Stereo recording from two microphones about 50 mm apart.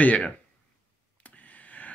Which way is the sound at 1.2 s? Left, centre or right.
Left.